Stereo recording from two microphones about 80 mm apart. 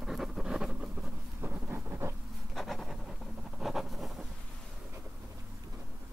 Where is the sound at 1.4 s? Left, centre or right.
Right.